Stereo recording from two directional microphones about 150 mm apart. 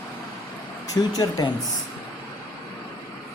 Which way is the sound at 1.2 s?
30° left (ahead or behind).